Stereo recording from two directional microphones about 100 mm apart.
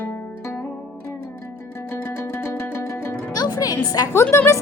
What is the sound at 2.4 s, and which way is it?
Music, 20° left (ahead or behind).